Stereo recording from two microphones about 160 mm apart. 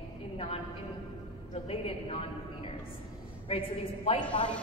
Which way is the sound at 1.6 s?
35° left (ahead or behind).